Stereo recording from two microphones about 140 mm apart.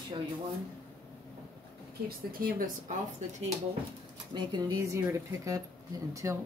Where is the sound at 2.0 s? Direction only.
90° right.